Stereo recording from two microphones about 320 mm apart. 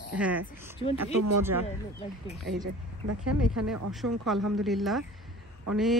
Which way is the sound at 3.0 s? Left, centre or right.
Right.